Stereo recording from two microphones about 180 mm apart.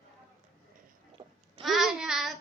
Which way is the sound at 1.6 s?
Centre (ahead or behind).